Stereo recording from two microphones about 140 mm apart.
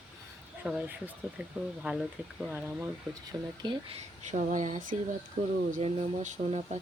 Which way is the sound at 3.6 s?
35° right (ahead or behind).